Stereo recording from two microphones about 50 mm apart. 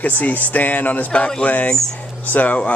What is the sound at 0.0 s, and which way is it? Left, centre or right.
A man's voice, left.